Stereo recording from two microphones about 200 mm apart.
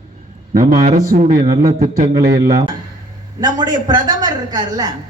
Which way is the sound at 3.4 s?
20° right (ahead or behind).